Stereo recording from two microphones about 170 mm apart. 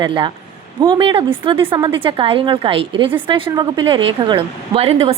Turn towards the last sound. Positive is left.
turn(degrees=-35)  # may be behind; listen again after turning